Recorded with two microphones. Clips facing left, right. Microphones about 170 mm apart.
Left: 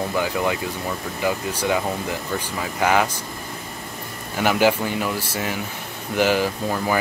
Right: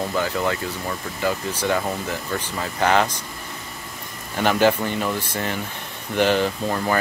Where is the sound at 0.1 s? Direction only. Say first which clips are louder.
Left 1 dB; 10° left (ahead or behind).